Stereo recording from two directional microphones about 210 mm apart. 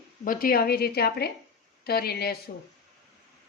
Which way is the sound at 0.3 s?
45° left (ahead or behind).